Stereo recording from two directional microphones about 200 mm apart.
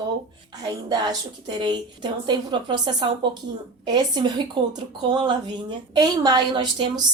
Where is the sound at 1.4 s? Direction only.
25° right (ahead or behind).